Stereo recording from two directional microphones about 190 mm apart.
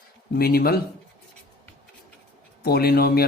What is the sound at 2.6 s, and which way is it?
Speech, 55° left (ahead or behind).